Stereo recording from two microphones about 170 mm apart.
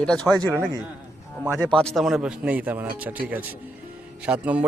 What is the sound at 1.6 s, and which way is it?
A man's voice, 5° left (ahead or behind).